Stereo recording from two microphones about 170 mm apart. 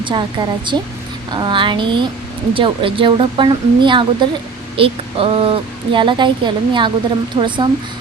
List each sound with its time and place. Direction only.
0.0 s speech: 30° right (ahead or behind)